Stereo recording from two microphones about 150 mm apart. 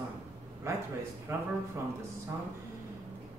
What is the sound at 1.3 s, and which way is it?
Speech, 20° right (ahead or behind).